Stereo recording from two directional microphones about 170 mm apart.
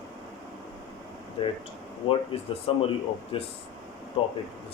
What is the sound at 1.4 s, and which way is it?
Speech, 35° left (ahead or behind).